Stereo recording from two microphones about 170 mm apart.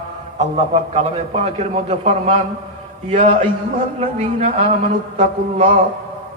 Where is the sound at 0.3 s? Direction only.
40° right (ahead or behind).